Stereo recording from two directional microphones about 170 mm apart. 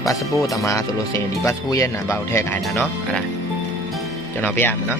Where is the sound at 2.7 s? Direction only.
5° left (ahead or behind).